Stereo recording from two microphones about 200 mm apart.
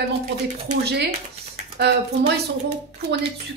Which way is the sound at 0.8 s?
55° right (ahead or behind).